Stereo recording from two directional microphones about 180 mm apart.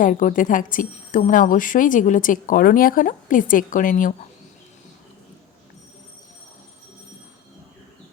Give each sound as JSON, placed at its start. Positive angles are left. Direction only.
{"t": 0.0, "sound": "a woman's voice", "side_deg": 45}